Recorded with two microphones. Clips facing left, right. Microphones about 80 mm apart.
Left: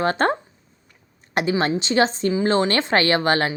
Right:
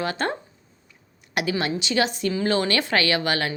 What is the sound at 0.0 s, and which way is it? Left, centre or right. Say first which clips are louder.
A woman's voice: left 6 dB; left.